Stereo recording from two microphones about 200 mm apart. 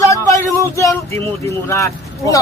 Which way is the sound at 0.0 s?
15° left (ahead or behind).